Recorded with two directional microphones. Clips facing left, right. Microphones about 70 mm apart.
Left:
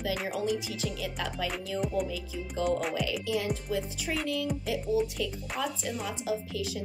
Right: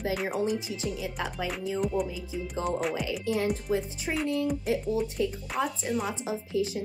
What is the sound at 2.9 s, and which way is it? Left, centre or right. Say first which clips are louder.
Speech: right 1 dB; right.